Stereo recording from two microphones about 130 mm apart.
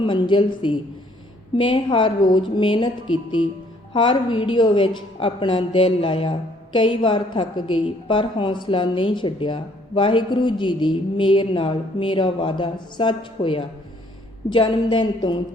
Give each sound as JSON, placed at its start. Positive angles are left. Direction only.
{"t": 0.0, "sound": "a woman's voice", "side_deg": 40}